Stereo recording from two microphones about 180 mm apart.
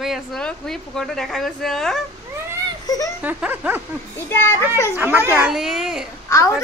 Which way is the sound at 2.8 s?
20° left (ahead or behind).